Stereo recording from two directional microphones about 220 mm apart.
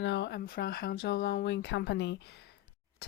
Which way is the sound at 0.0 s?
50° left (ahead or behind).